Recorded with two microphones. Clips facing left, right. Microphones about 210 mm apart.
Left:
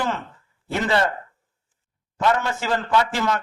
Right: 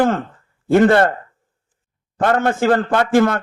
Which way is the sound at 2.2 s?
55° right (ahead or behind).